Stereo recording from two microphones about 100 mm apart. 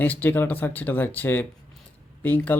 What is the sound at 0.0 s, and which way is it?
Speech, 20° left (ahead or behind).